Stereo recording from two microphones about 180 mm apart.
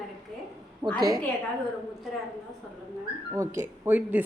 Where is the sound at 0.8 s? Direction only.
25° right (ahead or behind).